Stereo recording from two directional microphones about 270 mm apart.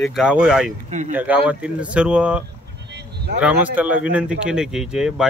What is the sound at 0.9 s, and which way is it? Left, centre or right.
Speech, right.